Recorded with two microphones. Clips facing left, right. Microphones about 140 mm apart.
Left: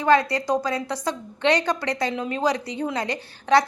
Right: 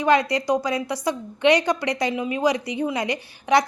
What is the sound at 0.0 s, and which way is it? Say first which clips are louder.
A woman's voice: even; 15° right (ahead or behind).